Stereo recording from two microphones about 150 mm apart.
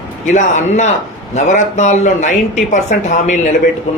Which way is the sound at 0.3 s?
55° left (ahead or behind).